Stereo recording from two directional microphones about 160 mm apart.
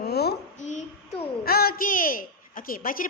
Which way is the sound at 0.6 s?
50° left (ahead or behind).